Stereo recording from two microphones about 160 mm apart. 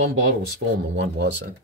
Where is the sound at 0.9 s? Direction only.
90° right.